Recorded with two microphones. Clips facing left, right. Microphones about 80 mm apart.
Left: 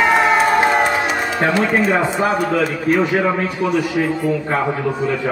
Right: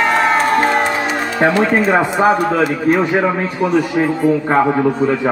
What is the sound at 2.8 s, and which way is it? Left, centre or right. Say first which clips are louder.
Speech: right 1 dB; right.